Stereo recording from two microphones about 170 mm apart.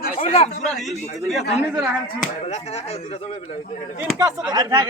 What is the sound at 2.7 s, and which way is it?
A man's voice, 35° left (ahead or behind).